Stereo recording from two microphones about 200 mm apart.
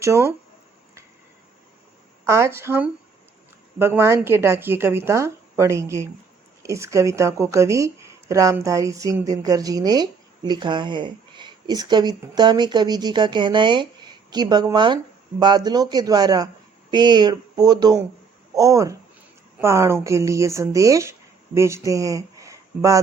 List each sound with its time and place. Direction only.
0.0 s a woman's voice: 15° right (ahead or behind)
2.2 s a woman's voice: 15° right (ahead or behind)